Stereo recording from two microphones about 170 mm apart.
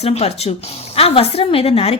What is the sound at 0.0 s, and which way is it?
A woman's voice, 40° left (ahead or behind).